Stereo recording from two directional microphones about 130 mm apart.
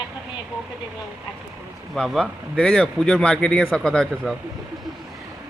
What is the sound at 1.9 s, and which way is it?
Speech, centre (ahead or behind).